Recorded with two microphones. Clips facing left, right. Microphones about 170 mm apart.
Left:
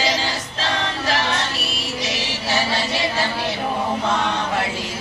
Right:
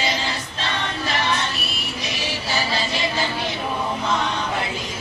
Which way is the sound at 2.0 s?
85° left.